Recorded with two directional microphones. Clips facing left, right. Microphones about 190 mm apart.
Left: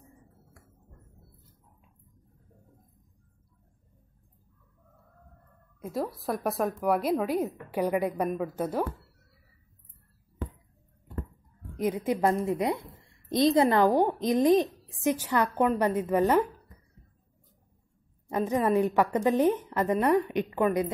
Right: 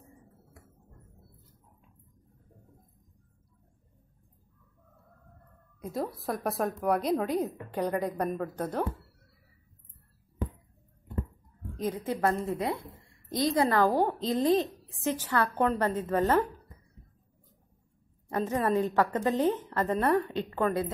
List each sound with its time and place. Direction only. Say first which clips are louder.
5.8 s a woman's voice: left 1 dB; centre (ahead or behind)
11.7 s a woman's voice: left 4 dB; 10° left (ahead or behind)
18.3 s a woman's voice: left 2 dB; 15° left (ahead or behind)